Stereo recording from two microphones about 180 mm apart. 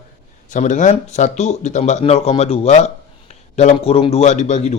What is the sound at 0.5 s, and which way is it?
Speech, 45° left (ahead or behind).